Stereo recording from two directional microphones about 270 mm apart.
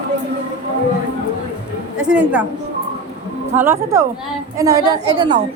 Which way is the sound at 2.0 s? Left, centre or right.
Centre.